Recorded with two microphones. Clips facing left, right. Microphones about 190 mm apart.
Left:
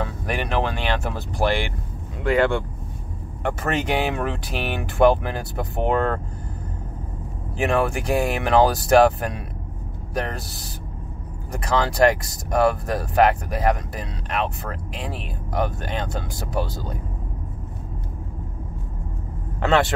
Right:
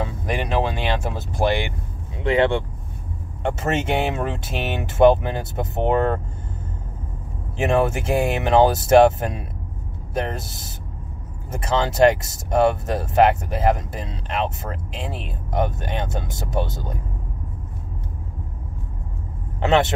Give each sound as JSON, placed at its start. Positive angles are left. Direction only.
{"t": 0.0, "sound": "vehicle", "side_deg": -15}
{"t": 2.2, "sound": "speech", "side_deg": -25}
{"t": 7.5, "sound": "speech", "side_deg": -25}
{"t": 19.6, "sound": "speech", "side_deg": -20}